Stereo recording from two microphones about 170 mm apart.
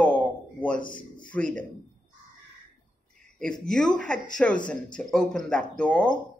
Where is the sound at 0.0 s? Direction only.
10° left (ahead or behind).